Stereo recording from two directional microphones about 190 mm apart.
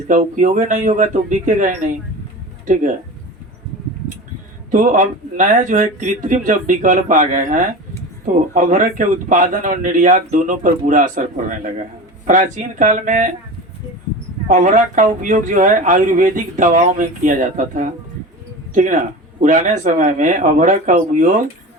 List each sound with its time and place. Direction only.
0.1 s a man's voice: 40° right (ahead or behind)
4.7 s speech: 40° right (ahead or behind)
14.4 s a man's voice: 40° right (ahead or behind)